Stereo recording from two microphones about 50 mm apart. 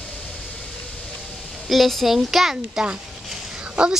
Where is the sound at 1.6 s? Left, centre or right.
Centre.